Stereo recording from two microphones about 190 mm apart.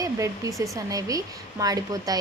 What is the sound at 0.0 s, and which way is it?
A woman's voice, 15° right (ahead or behind).